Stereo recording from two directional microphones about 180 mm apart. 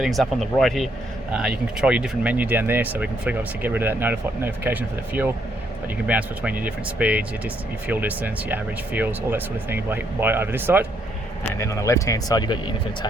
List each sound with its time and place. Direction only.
0.0 s speech: centre (ahead or behind)
11.5 s speech: 15° left (ahead or behind)